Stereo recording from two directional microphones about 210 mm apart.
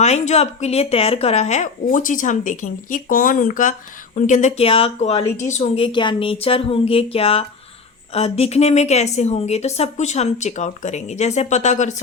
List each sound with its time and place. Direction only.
0.0 s a woman's voice: 30° left (ahead or behind)